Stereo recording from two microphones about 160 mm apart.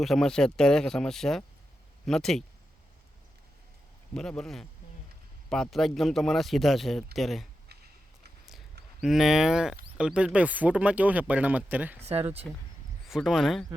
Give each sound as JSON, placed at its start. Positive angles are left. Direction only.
{"t": 0.0, "sound": "a man's voice", "side_deg": 0}
{"t": 4.1, "sound": "a man's voice", "side_deg": 5}
{"t": 9.0, "sound": "a man's voice", "side_deg": 0}
{"t": 12.0, "sound": "speech", "side_deg": -40}
{"t": 13.1, "sound": "a man's voice", "side_deg": 0}